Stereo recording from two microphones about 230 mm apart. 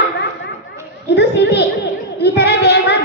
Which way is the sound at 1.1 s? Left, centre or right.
Left.